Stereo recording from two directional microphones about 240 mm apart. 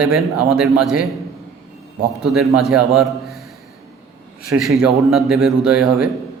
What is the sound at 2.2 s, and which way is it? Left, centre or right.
A man's voice, centre.